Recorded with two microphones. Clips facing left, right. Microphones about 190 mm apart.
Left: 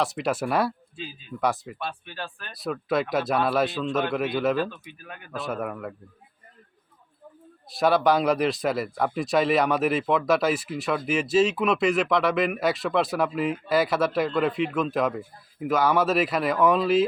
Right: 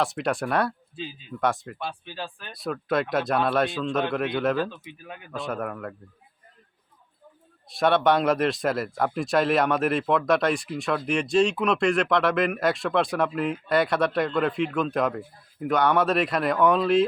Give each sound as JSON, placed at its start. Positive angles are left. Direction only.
{"t": 0.0, "sound": "speech", "side_deg": 0}
{"t": 1.9, "sound": "speech", "side_deg": -15}
{"t": 2.5, "sound": "speech", "side_deg": 0}
{"t": 4.7, "sound": "speech", "side_deg": -20}
{"t": 5.3, "sound": "speech", "side_deg": 0}
{"t": 7.7, "sound": "speech", "side_deg": 0}